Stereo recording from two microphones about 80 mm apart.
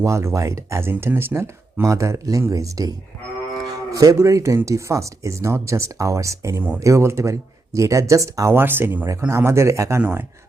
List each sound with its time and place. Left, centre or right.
0.0 s speech: right
8.5 s speech: right
9.0 s speech: right
10.0 s speech: right